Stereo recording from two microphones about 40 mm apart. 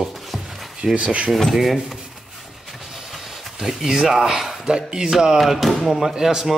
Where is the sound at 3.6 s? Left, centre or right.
Centre.